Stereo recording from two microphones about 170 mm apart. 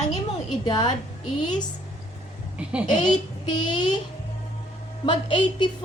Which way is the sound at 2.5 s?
5° right (ahead or behind).